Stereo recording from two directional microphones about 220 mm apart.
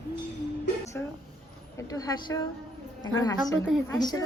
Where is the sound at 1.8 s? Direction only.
15° left (ahead or behind).